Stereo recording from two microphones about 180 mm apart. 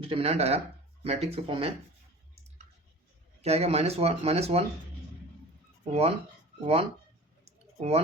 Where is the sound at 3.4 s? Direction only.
35° right (ahead or behind).